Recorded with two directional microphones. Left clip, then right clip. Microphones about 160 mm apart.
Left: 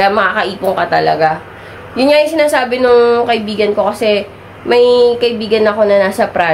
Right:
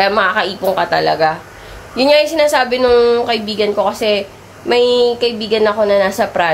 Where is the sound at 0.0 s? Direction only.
25° right (ahead or behind).